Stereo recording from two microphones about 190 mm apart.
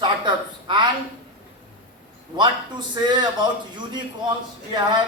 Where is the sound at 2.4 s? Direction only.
25° right (ahead or behind).